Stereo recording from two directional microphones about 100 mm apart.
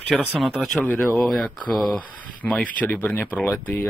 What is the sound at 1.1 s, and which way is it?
Speech, centre (ahead or behind).